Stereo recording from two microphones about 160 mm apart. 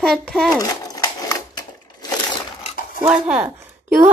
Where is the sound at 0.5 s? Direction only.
20° left (ahead or behind).